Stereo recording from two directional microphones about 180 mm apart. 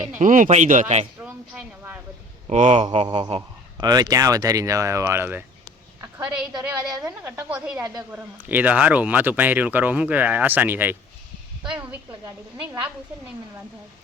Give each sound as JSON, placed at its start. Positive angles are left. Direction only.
{"t": 0.2, "sound": "speech", "side_deg": -45}
{"t": 2.5, "sound": "a man's voice", "side_deg": -40}
{"t": 6.5, "sound": "speech", "side_deg": -20}